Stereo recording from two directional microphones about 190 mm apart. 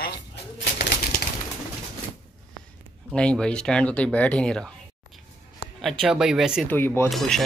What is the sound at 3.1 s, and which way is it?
Speech, 5° left (ahead or behind).